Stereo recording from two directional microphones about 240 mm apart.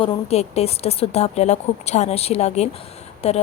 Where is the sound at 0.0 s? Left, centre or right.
Left.